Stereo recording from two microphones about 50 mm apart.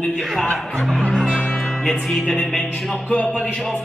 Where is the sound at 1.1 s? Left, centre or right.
Centre.